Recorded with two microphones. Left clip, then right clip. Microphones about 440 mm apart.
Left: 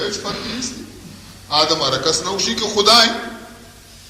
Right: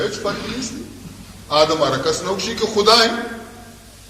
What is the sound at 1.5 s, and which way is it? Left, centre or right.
A man's voice, centre.